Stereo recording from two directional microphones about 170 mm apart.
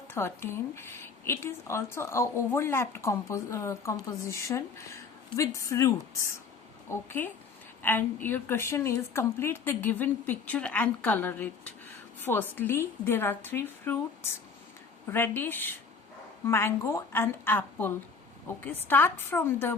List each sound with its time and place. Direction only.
0.1 s a woman's voice: 15° left (ahead or behind)